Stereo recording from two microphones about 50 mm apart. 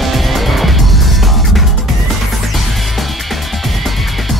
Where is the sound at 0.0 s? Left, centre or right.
Centre.